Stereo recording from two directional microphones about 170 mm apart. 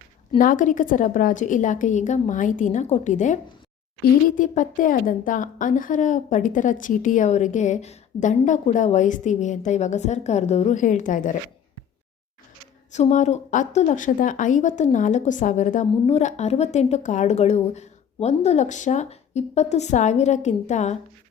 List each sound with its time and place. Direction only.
0.3 s a woman's voice: 50° left (ahead or behind)
12.9 s a woman's voice: 45° left (ahead or behind)